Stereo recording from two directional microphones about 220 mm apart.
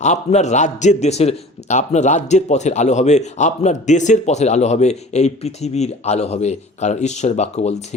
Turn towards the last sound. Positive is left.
turn(degrees=30)  # may be behind; listen again after turning